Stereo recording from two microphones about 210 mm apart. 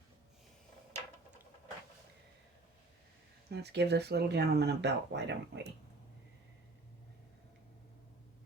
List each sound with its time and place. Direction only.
3.5 s speech: 50° right (ahead or behind)